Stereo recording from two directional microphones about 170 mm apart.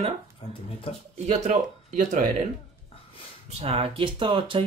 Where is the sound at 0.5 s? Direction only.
35° left (ahead or behind).